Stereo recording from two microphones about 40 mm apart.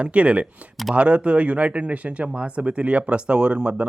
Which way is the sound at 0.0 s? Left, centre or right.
Right.